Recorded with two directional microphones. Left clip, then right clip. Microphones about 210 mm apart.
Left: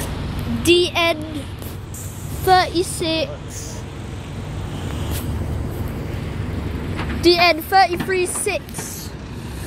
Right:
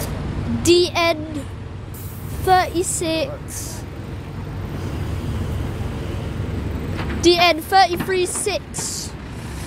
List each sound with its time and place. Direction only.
0.6 s speech: 50° right (ahead or behind)
2.4 s speech: 10° left (ahead or behind)
7.2 s speech: 5° right (ahead or behind)